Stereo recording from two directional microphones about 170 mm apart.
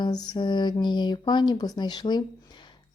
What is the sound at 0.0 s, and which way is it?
Speech, 25° left (ahead or behind).